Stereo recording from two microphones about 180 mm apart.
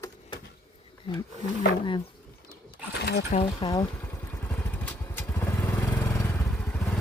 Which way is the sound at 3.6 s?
20° left (ahead or behind).